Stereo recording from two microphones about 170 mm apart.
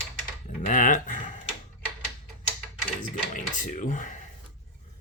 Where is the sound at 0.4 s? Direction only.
45° left (ahead or behind).